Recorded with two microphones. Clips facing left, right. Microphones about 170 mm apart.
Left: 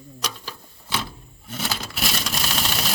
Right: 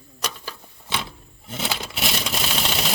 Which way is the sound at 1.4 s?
20° right (ahead or behind).